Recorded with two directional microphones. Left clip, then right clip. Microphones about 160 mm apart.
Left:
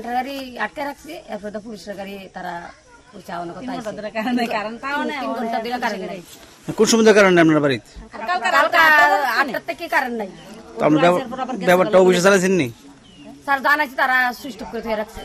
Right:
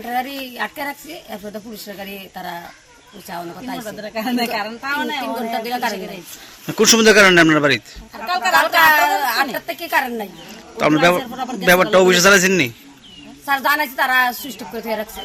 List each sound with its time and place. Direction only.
0.5 s a woman's voice: centre (ahead or behind)
4.0 s a man's voice: 10° left (ahead or behind)
5.5 s a woman's voice: centre (ahead or behind); by 8.5 s 15° left (ahead or behind)
8.6 s a woman's voice: centre (ahead or behind)
10.8 s a man's voice: 10° left (ahead or behind)
14.3 s speech: 25° left (ahead or behind)
14.7 s a woman's voice: 5° right (ahead or behind)